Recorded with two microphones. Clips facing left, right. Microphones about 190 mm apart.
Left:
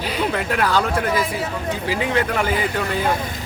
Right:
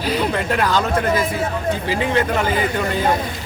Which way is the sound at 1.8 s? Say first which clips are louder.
Even; 5° left (ahead or behind).